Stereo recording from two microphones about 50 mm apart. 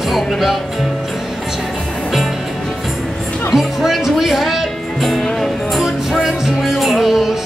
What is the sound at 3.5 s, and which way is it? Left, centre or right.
Music, centre.